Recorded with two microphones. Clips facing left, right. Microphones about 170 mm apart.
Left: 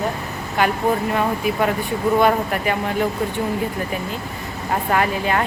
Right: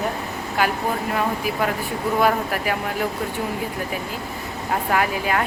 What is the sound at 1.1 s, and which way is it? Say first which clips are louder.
Speech: left 3 dB; centre (ahead or behind).